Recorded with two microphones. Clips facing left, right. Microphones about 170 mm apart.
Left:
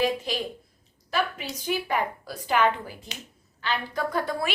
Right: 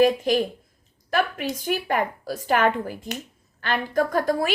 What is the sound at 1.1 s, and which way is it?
A woman's voice, 55° right (ahead or behind).